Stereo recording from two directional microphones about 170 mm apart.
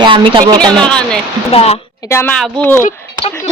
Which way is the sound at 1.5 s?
35° left (ahead or behind).